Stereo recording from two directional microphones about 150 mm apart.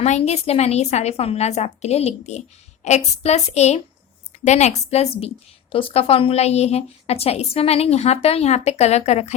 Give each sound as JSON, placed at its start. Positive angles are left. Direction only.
{"t": 0.0, "sound": "a woman's voice", "side_deg": 45}